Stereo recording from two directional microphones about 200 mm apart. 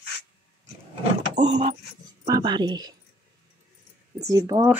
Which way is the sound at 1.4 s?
35° right (ahead or behind).